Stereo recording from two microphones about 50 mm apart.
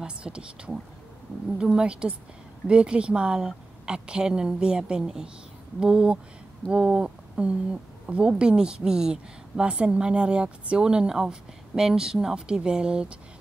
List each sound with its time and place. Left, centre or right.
0.0 s a woman's voice: centre